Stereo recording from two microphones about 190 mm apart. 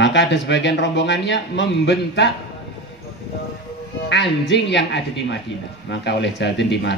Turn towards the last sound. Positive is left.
turn(degrees=65)  # may be behind; listen again after turning